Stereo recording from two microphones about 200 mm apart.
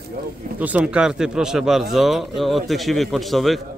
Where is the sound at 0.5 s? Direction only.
5° right (ahead or behind).